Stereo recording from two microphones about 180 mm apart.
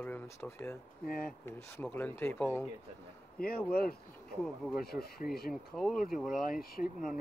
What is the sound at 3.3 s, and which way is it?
Speech, 60° left (ahead or behind).